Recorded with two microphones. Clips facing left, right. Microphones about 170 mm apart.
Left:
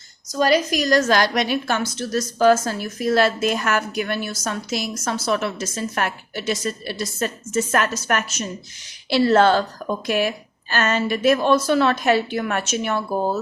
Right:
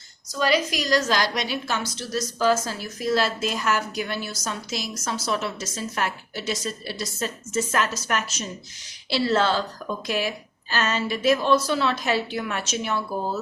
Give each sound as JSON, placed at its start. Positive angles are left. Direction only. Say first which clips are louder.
{"t": 0.3, "sound": "a woman's voice", "louder": "left 4 dB", "side_deg": 45}